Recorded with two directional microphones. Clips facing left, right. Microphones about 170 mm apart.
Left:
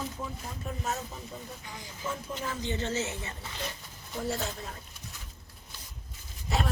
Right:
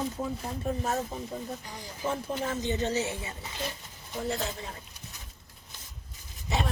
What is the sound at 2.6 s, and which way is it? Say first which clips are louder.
Speech: right 1 dB; 20° right (ahead or behind).